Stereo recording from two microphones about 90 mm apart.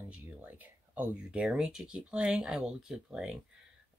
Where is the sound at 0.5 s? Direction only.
15° right (ahead or behind).